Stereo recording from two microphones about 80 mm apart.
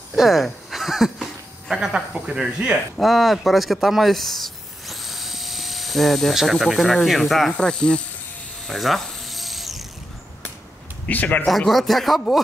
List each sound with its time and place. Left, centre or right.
0.1 s speech: centre
7.5 s speech: centre
8.6 s ratchet: centre
11.1 s a man's voice: centre
11.4 s speech: centre